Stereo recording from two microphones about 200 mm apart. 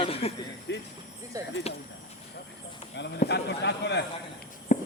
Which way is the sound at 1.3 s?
15° right (ahead or behind).